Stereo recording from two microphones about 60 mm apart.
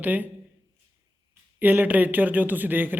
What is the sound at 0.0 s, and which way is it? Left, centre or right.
Speech, right.